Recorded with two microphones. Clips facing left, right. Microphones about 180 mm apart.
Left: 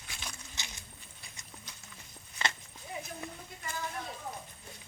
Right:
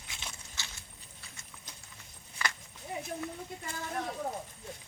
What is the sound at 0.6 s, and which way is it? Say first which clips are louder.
Walk: even; 20° left (ahead or behind).